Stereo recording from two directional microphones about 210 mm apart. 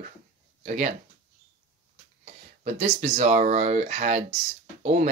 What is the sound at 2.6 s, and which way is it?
Speech, 30° right (ahead or behind).